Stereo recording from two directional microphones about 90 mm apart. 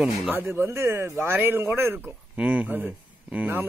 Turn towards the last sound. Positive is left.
turn(degrees=-20)  # may be behind; listen again after turning